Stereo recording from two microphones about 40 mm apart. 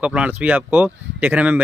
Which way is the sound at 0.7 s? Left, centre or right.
Right.